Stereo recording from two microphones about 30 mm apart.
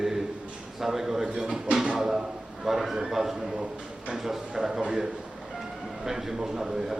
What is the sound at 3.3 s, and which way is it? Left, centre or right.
Speech, right.